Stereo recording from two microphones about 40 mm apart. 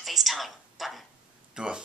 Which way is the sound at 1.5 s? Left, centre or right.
Right.